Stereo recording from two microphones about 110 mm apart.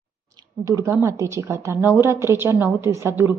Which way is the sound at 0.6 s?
30° right (ahead or behind).